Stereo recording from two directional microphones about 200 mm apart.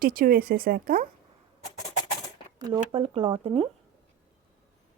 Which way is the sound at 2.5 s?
25° right (ahead or behind).